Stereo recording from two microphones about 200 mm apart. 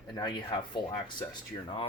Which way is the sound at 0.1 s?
20° left (ahead or behind).